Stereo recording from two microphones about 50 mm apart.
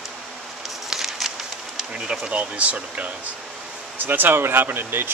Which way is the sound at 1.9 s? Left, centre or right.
Centre.